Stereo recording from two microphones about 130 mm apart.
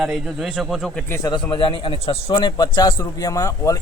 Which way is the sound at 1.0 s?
20° left (ahead or behind).